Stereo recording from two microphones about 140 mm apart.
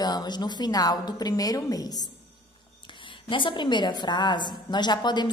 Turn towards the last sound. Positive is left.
turn(degrees=30)  # may be behind; listen again after turning